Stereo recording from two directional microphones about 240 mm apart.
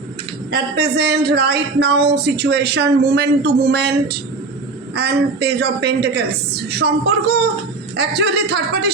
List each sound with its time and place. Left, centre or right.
0.5 s speech: right